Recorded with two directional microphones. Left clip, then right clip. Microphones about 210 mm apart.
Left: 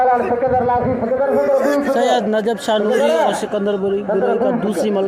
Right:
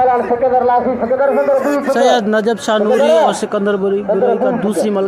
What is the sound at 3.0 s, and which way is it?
Speech, 45° right (ahead or behind).